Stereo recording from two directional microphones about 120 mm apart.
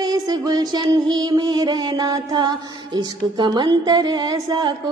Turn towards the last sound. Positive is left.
turn(degrees=-35)  # may be behind; listen again after turning